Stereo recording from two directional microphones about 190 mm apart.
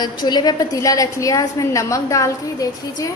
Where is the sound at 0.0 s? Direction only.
20° left (ahead or behind).